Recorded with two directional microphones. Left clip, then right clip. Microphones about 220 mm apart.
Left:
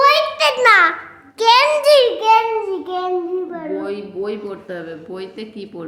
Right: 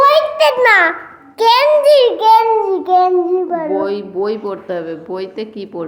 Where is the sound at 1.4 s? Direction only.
20° left (ahead or behind).